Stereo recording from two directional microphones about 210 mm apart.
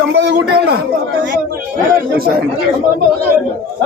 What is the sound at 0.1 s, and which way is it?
Speech, 55° right (ahead or behind).